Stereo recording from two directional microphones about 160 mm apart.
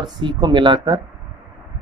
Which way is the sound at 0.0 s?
30° right (ahead or behind).